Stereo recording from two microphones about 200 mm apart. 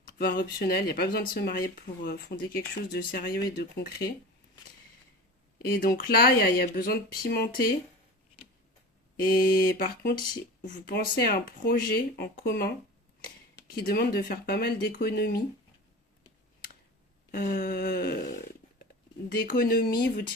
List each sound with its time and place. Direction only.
0.2 s speech: 45° left (ahead or behind)
5.5 s speech: 50° left (ahead or behind)
9.1 s speech: 45° left (ahead or behind)
17.3 s speech: 50° left (ahead or behind)
19.3 s speech: 45° left (ahead or behind)